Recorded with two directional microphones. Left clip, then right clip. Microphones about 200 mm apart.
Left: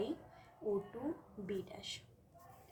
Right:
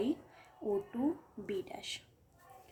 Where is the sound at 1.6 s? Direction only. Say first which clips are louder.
Right 4 dB; 45° right (ahead or behind).